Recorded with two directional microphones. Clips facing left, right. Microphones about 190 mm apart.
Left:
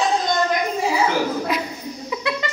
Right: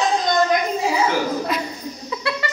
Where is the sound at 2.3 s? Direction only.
15° left (ahead or behind).